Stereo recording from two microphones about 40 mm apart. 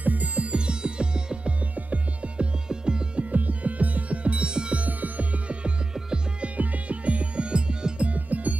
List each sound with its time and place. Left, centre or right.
0.0 s music: right
0.5 s music: right
1.8 s music: right
2.7 s music: right
3.3 s music: right
4.7 s music: right
5.9 s music: centre
6.4 s music: right
8.1 s music: right